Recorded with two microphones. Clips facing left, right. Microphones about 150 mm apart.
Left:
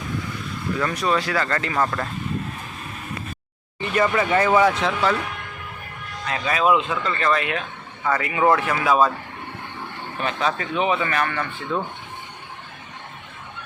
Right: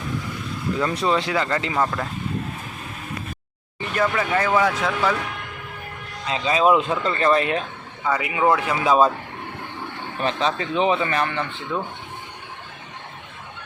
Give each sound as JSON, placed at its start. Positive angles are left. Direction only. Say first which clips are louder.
{"t": 0.8, "sound": "speech", "louder": "right 1 dB", "side_deg": -20}
{"t": 3.9, "sound": "speech", "louder": "left 2 dB", "side_deg": 0}
{"t": 6.2, "sound": "a man's voice", "louder": "right 2 dB", "side_deg": -20}
{"t": 6.8, "sound": "speech", "louder": "right 3 dB", "side_deg": -35}
{"t": 8.0, "sound": "speech", "louder": "left 1 dB", "side_deg": -10}
{"t": 10.2, "sound": "a man's voice", "louder": "right 1 dB", "side_deg": -30}
{"t": 11.7, "sound": "speech", "louder": "left 2 dB", "side_deg": -10}